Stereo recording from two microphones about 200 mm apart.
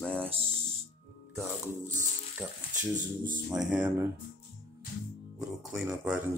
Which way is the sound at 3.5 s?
5° right (ahead or behind).